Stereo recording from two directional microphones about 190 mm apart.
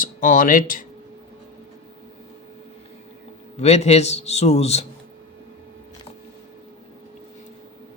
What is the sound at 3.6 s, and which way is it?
A man's voice, 35° left (ahead or behind).